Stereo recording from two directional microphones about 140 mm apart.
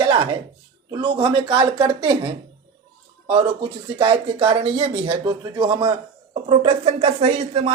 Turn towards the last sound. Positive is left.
turn(degrees=-50)  # may be behind; listen again after turning